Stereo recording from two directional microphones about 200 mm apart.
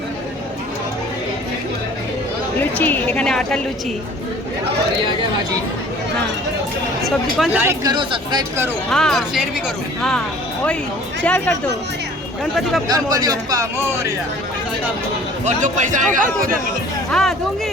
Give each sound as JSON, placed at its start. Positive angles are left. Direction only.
{"t": 2.6, "sound": "a woman's voice", "side_deg": 10}
{"t": 7.0, "sound": "speech", "side_deg": 0}
{"t": 7.9, "sound": "speech", "side_deg": -25}
{"t": 8.9, "sound": "a woman's voice", "side_deg": 0}
{"t": 12.9, "sound": "speech", "side_deg": -20}
{"t": 15.4, "sound": "a man's voice", "side_deg": -40}
{"t": 17.1, "sound": "a sound", "side_deg": 0}